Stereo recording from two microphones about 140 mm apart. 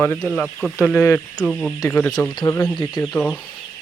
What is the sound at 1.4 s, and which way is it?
Speech, 5° left (ahead or behind).